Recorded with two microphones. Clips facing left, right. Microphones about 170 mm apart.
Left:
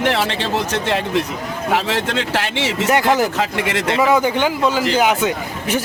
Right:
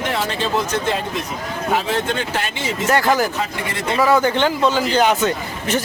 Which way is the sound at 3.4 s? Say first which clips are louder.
Left 5 dB; 75° left (ahead or behind).